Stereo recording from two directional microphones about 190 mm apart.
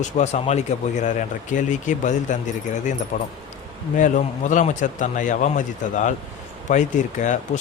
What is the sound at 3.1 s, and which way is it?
A man's voice, 50° left (ahead or behind).